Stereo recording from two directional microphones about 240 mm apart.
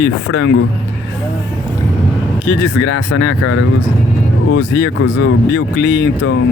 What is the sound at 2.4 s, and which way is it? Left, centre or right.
Speech, left.